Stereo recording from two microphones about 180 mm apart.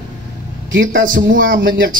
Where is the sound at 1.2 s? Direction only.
50° right (ahead or behind).